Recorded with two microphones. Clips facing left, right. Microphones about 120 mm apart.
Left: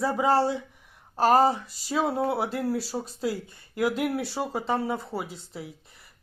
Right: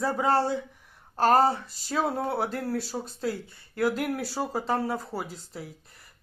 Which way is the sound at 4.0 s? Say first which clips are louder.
Left 2 dB; centre (ahead or behind).